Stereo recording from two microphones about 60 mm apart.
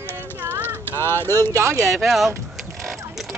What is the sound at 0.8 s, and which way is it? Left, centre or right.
Speech, left.